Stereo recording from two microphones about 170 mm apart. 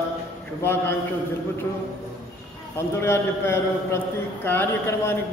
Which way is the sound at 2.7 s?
15° left (ahead or behind).